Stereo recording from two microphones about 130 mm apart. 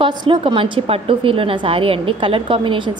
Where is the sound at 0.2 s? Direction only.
40° right (ahead or behind).